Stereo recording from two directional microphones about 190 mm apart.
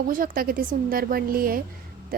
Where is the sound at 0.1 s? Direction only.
45° right (ahead or behind).